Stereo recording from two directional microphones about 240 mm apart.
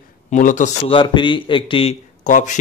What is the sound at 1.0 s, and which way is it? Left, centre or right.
A man's voice, centre.